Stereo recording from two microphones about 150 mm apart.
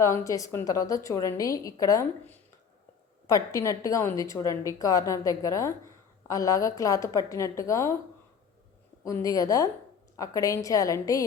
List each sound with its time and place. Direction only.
0.0 s a woman's voice: 20° left (ahead or behind)
3.2 s a woman's voice: 25° left (ahead or behind)
9.0 s a woman's voice: 20° left (ahead or behind)